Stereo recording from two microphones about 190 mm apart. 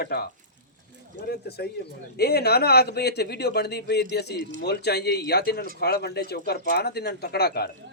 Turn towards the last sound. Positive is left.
turn(degrees=55)  # may be behind; listen again after turning